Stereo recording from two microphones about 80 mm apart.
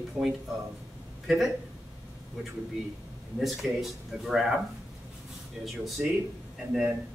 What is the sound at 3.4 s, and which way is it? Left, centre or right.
A man's voice, centre.